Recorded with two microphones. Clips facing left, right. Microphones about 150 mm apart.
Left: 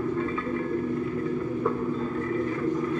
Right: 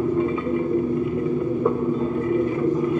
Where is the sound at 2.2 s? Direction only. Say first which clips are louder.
Right 7 dB; 15° right (ahead or behind).